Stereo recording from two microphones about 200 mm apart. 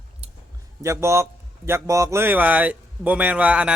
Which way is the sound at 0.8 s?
15° right (ahead or behind).